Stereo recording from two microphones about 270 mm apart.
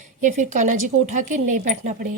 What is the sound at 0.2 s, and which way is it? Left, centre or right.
Speech, right.